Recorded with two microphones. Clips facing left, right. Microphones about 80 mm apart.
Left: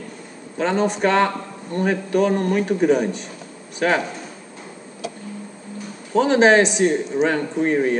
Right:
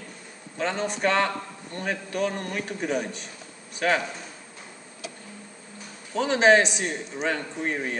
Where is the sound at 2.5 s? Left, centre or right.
Centre.